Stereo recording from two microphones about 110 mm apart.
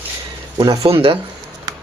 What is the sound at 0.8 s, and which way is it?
Speech, 60° right (ahead or behind).